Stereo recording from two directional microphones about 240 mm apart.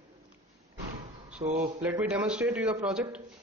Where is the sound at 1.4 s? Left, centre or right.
Right.